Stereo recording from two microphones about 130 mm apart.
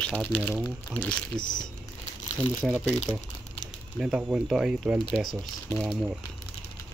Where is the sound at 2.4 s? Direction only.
15° right (ahead or behind).